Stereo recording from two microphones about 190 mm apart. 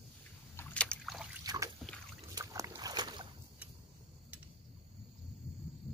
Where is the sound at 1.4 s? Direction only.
20° right (ahead or behind).